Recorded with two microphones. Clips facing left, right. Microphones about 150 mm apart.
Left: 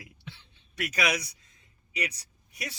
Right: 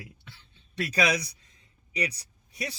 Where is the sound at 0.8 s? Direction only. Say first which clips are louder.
Right 3 dB; 30° right (ahead or behind).